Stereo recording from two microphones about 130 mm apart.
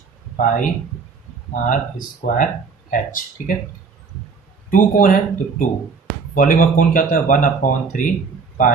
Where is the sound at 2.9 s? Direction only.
90° left.